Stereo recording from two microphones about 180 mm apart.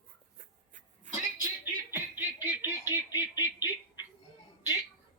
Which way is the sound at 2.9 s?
15° right (ahead or behind).